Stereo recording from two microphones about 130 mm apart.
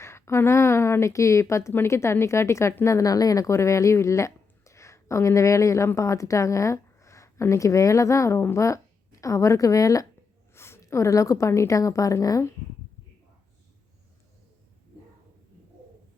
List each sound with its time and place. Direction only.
0.0 s a woman's voice: 20° left (ahead or behind)